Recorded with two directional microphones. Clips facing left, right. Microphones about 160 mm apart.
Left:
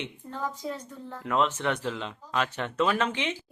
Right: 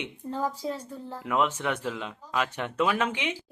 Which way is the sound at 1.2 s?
10° right (ahead or behind).